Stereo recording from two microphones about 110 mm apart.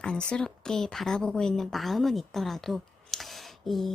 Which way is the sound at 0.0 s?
10° left (ahead or behind).